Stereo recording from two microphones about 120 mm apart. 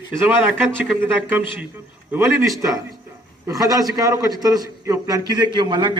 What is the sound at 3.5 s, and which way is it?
A man's voice, 30° right (ahead or behind).